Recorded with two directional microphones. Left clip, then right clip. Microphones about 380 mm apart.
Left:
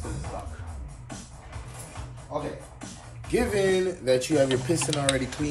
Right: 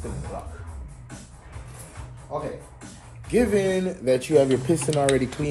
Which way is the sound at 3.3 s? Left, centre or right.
Centre.